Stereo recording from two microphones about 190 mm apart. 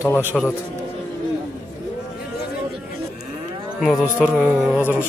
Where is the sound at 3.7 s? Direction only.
Centre (ahead or behind).